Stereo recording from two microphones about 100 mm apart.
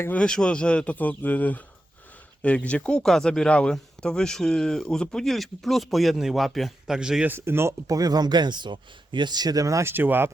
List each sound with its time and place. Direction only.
0.0 s speech: 15° left (ahead or behind); by 7.3 s 5° right (ahead or behind)
7.3 s speech: 25° right (ahead or behind)
9.9 s speech: 20° right (ahead or behind)